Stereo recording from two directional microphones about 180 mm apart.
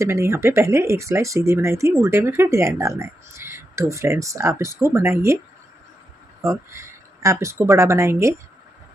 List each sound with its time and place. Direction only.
0.0 s speech: 15° right (ahead or behind)
6.4 s speech: 15° right (ahead or behind)